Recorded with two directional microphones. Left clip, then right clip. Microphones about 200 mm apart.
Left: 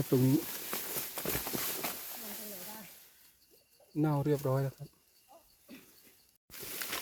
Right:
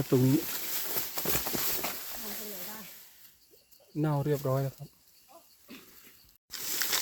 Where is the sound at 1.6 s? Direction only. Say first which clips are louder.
Right 4 dB; 15° right (ahead or behind).